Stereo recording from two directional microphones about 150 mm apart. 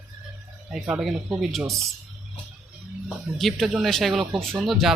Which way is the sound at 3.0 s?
Centre (ahead or behind).